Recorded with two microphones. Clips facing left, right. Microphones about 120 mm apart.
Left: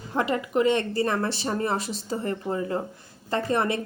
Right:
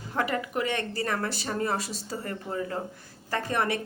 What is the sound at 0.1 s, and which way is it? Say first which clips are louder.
Speech: left 4 dB; 25° left (ahead or behind).